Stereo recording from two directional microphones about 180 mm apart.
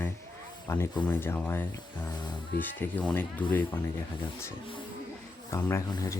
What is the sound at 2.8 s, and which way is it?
Speech, 10° left (ahead or behind).